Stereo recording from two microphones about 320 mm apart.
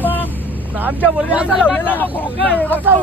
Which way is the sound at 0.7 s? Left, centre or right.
Centre.